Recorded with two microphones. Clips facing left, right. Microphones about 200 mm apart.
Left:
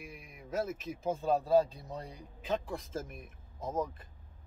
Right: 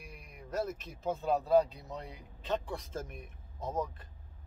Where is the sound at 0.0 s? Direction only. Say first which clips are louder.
Left 2 dB; 5° left (ahead or behind).